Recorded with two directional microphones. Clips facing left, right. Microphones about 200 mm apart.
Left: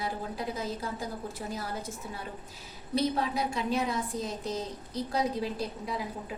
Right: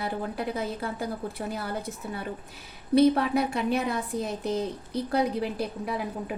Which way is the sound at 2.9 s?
60° right (ahead or behind).